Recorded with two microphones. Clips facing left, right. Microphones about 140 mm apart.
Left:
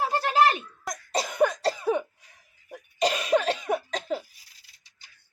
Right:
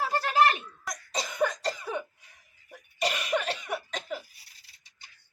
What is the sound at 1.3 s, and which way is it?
Cough, 60° left (ahead or behind).